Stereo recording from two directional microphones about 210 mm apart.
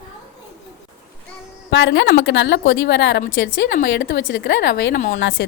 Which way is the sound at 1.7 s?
60° left (ahead or behind).